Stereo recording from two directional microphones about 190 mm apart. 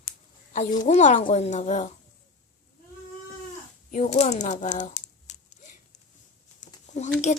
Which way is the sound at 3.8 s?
40° left (ahead or behind).